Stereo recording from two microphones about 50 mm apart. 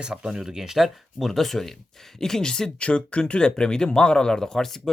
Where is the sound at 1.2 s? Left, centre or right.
Centre.